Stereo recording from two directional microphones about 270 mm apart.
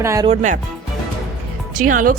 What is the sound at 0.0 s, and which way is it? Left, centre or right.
Speech, centre.